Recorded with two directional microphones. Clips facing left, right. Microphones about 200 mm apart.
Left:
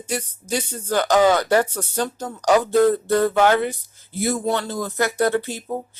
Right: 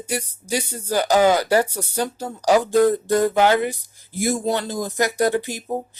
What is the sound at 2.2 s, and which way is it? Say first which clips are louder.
Speech: even; 30° right (ahead or behind).